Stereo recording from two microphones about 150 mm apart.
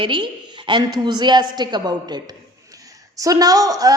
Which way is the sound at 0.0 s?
30° right (ahead or behind).